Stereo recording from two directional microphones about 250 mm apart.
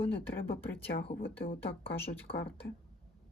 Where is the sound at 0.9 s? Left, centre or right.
Left.